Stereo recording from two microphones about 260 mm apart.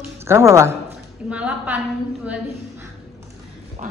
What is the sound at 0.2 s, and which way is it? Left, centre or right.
A woman's voice, centre.